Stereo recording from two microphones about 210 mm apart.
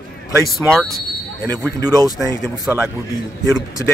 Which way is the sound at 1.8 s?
20° right (ahead or behind).